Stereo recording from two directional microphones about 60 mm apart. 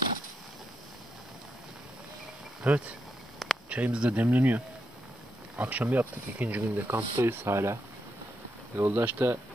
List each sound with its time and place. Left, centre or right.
2.6 s speech: right
6.7 s speech: right
8.8 s speech: right